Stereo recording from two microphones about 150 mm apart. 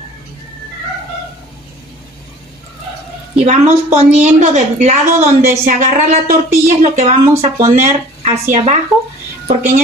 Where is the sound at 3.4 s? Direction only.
50° right (ahead or behind).